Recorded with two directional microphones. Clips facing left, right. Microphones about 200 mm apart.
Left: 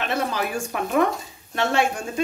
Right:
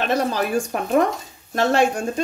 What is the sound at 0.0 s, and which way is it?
Speech, 35° right (ahead or behind).